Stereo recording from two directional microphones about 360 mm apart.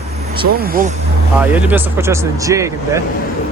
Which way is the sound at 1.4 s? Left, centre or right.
Centre.